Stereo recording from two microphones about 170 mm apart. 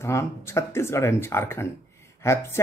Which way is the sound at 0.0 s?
15° left (ahead or behind).